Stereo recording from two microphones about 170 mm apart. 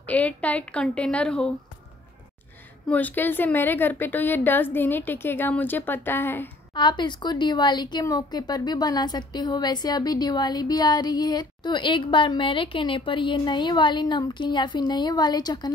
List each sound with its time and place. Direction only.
0.0 s a woman's voice: 10° left (ahead or behind)
2.9 s a woman's voice: 10° left (ahead or behind)
6.7 s speech: 25° left (ahead or behind)